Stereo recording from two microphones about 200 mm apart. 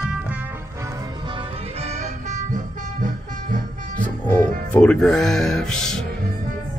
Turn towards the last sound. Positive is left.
turn(degrees=5)  # may be behind; listen again after turning